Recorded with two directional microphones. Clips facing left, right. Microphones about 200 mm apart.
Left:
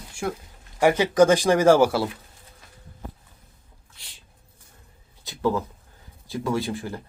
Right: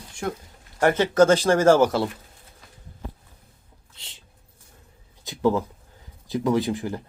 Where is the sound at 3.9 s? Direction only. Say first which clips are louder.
Right 3 dB; 25° right (ahead or behind).